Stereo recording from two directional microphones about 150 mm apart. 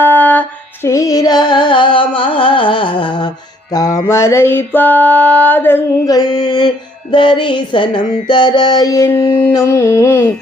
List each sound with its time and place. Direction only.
0.0 s carnatic music: 10° left (ahead or behind); by 3.8 s 25° left (ahead or behind)
4.1 s a sound: 20° left (ahead or behind)
6.1 s mantra: 25° left (ahead or behind)
7.1 s music: 30° left (ahead or behind)
8.3 s mantra: 30° left (ahead or behind)